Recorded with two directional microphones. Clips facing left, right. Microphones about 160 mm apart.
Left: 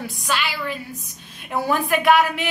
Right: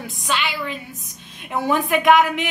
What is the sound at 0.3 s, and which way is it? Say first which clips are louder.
A woman's voice: right 1 dB; 20° right (ahead or behind).